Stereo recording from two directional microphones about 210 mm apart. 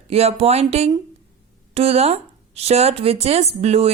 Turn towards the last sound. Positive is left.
turn(degrees=-30)  # may be behind; listen again after turning